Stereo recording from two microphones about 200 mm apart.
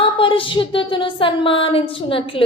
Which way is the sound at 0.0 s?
25° left (ahead or behind).